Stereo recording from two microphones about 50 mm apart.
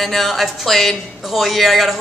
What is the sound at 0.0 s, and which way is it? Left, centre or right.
A woman's voice, centre.